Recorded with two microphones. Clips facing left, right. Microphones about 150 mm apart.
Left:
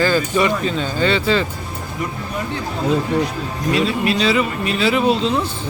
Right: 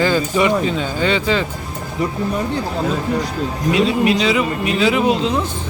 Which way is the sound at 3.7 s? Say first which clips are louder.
Right 3 dB; 15° right (ahead or behind).